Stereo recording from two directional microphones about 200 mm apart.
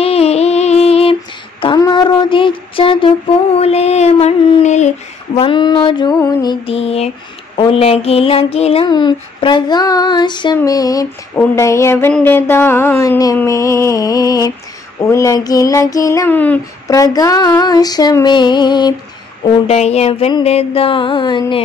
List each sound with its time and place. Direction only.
0.0 s music: 30° left (ahead or behind)
1.6 s child singing: 20° left (ahead or behind)
7.5 s a sound: 30° left (ahead or behind)
19.7 s child singing: 30° left (ahead or behind)